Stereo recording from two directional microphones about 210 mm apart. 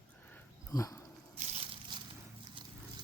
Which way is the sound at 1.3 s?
30° right (ahead or behind).